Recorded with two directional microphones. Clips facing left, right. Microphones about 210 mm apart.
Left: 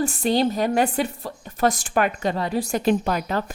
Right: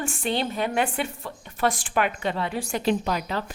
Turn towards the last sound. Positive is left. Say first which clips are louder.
# left 3 dB
turn(degrees=50)  # may be behind; listen again after turning